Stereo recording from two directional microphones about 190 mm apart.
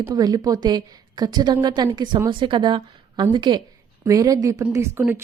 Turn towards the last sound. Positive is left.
turn(degrees=-15)  # may be behind; listen again after turning